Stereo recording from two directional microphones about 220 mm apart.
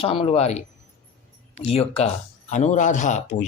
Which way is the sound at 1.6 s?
25° left (ahead or behind).